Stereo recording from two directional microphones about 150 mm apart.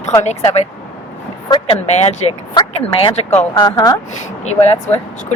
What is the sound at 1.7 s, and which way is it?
Speech, 45° left (ahead or behind).